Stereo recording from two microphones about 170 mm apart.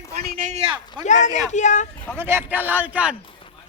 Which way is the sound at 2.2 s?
15° right (ahead or behind).